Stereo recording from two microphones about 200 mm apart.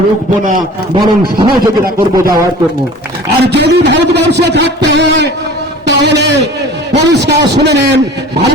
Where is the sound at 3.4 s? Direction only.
55° right (ahead or behind).